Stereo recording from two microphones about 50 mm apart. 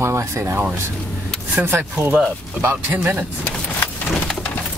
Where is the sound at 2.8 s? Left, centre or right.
Right.